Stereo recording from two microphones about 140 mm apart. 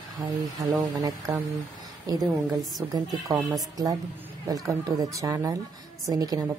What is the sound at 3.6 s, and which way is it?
Speech, 25° right (ahead or behind).